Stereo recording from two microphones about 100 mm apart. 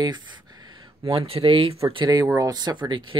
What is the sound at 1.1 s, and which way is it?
Speech, 75° right (ahead or behind).